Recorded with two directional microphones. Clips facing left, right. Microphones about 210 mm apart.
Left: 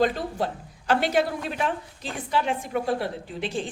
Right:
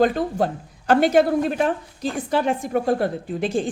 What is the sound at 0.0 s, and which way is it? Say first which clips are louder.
Speech: right 5 dB; 50° right (ahead or behind).